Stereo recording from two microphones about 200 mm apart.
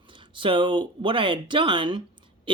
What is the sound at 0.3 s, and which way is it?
Speech, 25° right (ahead or behind).